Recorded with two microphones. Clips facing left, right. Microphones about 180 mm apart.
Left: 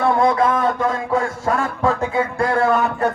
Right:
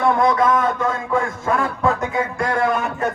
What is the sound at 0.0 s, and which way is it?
A man's voice, 30° left (ahead or behind).